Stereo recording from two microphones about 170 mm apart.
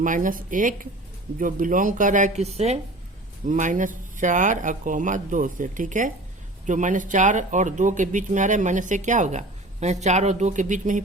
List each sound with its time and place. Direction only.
0.0 s speech: 50° right (ahead or behind)